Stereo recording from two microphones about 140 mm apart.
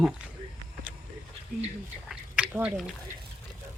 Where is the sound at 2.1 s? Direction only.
5° right (ahead or behind).